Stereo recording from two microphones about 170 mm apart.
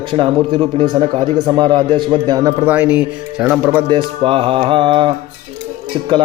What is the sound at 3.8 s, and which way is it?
Music, 30° right (ahead or behind).